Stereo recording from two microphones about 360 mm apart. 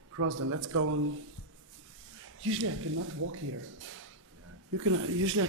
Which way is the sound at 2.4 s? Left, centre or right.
Right.